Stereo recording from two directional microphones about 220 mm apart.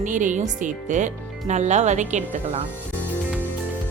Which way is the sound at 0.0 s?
35° right (ahead or behind).